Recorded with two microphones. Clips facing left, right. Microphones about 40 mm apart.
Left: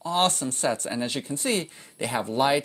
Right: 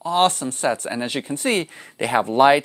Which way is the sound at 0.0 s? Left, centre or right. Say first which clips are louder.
Right 5 dB; right.